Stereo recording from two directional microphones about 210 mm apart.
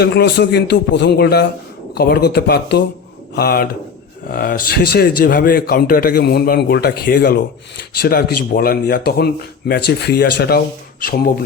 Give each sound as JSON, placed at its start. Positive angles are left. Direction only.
{"t": 0.0, "sound": "speech", "side_deg": 55}